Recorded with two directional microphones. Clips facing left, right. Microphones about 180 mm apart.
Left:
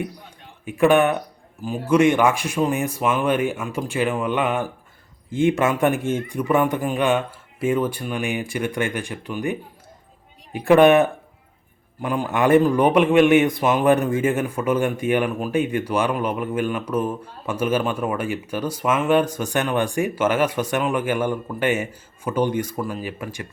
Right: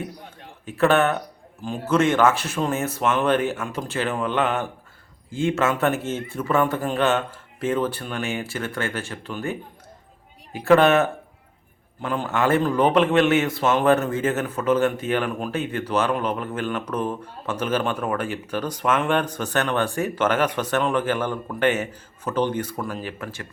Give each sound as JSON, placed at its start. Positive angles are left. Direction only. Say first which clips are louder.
{"t": 0.6, "sound": "a man's voice", "louder": "left 3 dB", "side_deg": 15}